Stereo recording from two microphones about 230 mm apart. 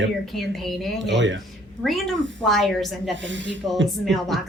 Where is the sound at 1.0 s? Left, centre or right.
Right.